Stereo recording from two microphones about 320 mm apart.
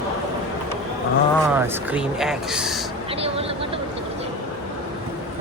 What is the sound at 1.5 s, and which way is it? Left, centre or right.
Speech, centre.